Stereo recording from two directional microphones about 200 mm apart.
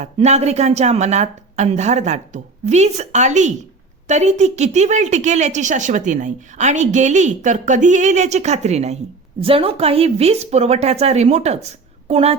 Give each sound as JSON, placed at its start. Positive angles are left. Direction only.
{"t": 0.0, "sound": "a woman's voice", "side_deg": -35}